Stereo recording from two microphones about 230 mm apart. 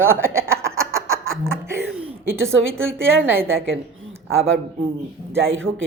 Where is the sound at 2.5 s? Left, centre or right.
Right.